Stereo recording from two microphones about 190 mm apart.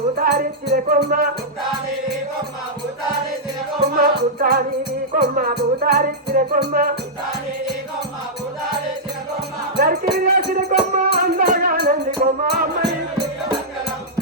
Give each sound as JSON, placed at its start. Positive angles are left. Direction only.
{"t": 0.2, "sound": "music", "side_deg": -55}
{"t": 3.8, "sound": "music", "side_deg": -55}
{"t": 9.7, "sound": "music", "side_deg": -50}